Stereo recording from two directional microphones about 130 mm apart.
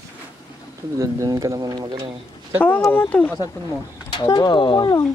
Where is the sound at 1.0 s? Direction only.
25° right (ahead or behind).